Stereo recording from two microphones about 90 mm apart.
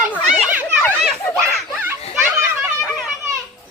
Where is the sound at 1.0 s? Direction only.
Centre (ahead or behind).